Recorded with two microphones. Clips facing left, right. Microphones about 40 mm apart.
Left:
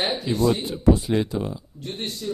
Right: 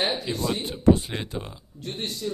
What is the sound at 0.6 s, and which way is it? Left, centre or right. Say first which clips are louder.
Speech: even; right.